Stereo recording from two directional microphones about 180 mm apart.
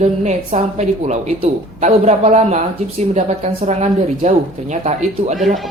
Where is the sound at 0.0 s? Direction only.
40° right (ahead or behind).